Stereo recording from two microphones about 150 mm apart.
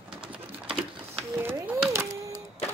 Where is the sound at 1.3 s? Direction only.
15° right (ahead or behind).